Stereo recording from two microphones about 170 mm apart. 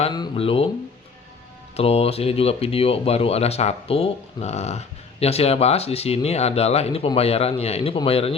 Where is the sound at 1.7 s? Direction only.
35° left (ahead or behind).